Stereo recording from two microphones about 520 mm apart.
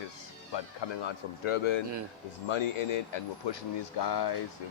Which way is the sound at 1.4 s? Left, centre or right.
Left.